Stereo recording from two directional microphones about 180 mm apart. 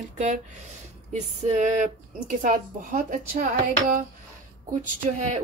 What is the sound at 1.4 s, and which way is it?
Speech, 40° right (ahead or behind).